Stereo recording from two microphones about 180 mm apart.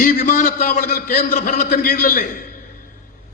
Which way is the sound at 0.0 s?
45° left (ahead or behind).